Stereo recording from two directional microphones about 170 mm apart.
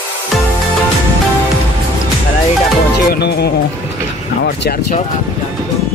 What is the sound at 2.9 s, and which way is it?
Music, 75° left (ahead or behind).